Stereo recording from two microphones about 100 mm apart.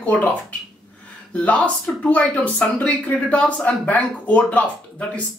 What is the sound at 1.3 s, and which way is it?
Speech, 15° left (ahead or behind).